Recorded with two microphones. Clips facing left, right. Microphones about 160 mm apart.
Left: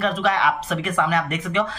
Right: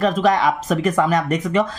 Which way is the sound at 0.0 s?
40° right (ahead or behind).